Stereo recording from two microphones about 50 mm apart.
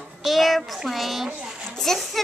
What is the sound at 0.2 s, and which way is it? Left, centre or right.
A child's voice, centre.